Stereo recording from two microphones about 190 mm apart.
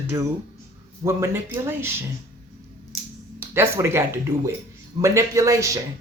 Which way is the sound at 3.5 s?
15° right (ahead or behind).